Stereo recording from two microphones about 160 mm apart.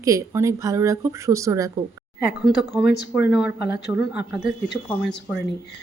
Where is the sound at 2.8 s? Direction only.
5° right (ahead or behind).